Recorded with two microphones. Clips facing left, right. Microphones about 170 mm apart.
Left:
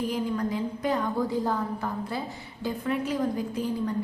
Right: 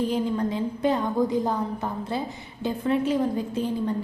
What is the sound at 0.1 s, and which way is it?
A woman's voice, 25° right (ahead or behind).